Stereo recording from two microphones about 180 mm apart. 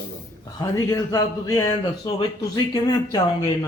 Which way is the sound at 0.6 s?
20° left (ahead or behind).